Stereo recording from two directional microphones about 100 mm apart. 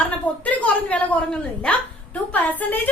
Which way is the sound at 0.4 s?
15° left (ahead or behind).